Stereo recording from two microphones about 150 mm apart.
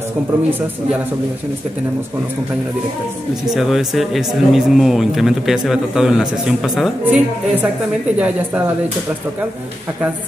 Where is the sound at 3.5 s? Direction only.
Centre (ahead or behind).